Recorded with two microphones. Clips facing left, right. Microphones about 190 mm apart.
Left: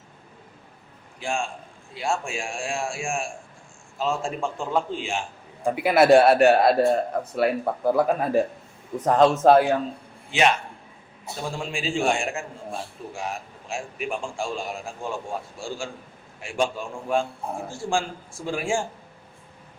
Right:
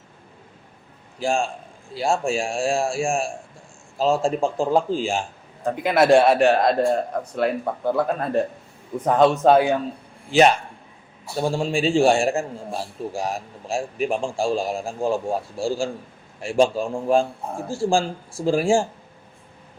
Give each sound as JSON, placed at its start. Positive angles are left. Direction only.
{"t": 1.2, "sound": "a man's voice", "side_deg": -35}
{"t": 5.6, "sound": "speech", "side_deg": 10}
{"t": 11.3, "sound": "a man's voice", "side_deg": -30}